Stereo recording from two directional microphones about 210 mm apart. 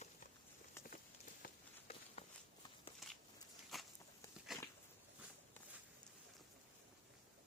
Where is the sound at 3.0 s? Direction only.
Centre (ahead or behind).